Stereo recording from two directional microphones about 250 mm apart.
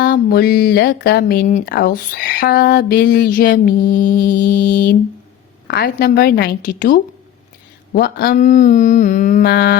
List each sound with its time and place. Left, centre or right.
0.0 s speech: left